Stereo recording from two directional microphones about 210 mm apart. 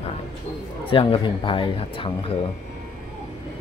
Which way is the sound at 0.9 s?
25° left (ahead or behind).